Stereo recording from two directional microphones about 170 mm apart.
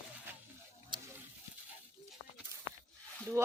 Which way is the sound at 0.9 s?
25° right (ahead or behind).